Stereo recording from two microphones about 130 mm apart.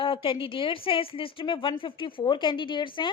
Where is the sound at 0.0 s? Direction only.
40° left (ahead or behind).